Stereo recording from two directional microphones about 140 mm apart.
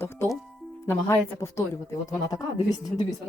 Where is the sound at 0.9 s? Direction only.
20° left (ahead or behind).